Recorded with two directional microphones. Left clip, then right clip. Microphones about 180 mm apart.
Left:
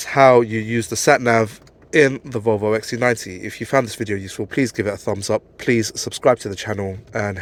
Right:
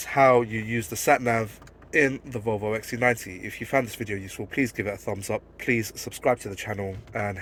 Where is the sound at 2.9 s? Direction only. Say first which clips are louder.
Left 5 dB; 35° left (ahead or behind).